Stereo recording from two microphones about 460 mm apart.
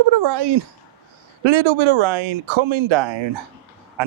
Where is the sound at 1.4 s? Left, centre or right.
Right.